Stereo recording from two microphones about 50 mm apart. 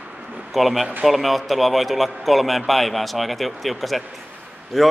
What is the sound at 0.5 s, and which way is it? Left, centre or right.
A man's voice, centre.